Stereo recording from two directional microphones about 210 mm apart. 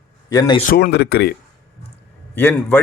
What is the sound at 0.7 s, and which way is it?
Speech, 50° left (ahead or behind).